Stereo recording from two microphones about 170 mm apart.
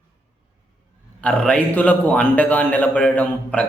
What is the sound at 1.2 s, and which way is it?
A man's voice, 5° left (ahead or behind).